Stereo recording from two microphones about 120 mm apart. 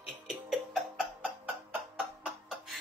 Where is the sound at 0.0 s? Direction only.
5° right (ahead or behind).